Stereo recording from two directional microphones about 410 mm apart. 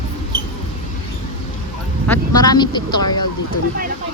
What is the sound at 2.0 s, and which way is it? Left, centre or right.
Speech, centre.